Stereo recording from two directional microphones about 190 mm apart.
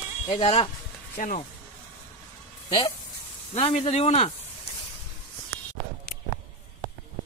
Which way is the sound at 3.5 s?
30° left (ahead or behind).